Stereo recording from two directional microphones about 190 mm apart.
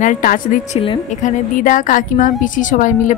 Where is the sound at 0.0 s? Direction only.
45° left (ahead or behind).